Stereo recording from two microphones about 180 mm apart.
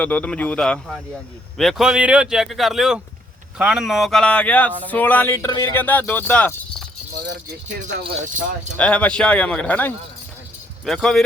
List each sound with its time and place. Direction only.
0.0 s speech: 10° left (ahead or behind)
8.3 s speech: 45° right (ahead or behind)
8.8 s speech: 5° left (ahead or behind)